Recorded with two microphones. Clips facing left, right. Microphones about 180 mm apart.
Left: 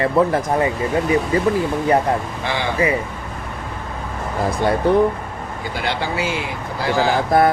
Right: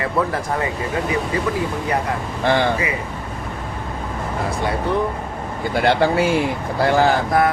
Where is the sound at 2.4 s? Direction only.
55° right (ahead or behind).